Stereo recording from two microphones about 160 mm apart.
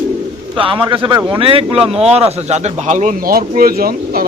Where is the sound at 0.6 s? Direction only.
35° right (ahead or behind); by 4.2 s 65° right (ahead or behind).